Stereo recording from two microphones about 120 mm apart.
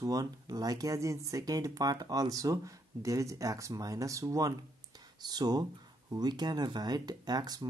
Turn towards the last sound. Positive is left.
turn(degrees=-35)  # may be behind; listen again after turning